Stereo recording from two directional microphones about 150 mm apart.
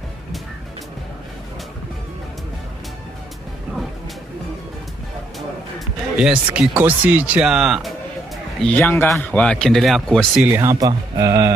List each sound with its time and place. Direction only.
6.1 s speech: 5° right (ahead or behind)
8.5 s a man's voice: 10° left (ahead or behind)
10.4 s speech: 20° right (ahead or behind)